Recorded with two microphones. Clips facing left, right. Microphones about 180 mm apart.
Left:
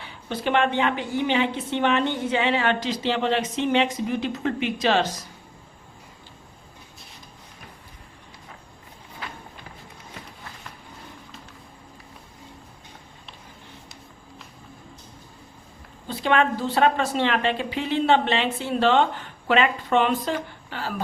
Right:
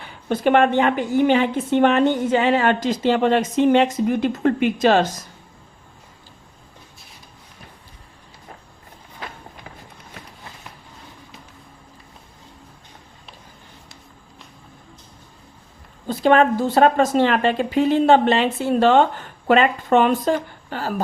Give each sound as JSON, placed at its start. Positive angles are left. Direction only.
{"t": 0.0, "sound": "a woman's voice", "side_deg": -50}
{"t": 16.0, "sound": "a woman's voice", "side_deg": -40}